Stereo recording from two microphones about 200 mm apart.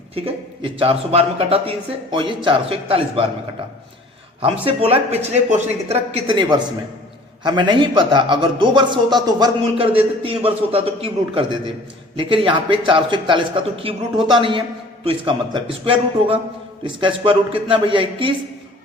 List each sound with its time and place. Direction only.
0.6 s a man's voice: 30° right (ahead or behind)
4.6 s a man's voice: 30° right (ahead or behind)